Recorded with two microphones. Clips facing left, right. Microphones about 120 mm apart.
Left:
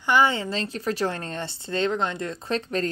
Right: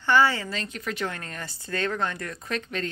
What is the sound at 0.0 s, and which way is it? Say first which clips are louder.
Speech: left 1 dB; 15° left (ahead or behind).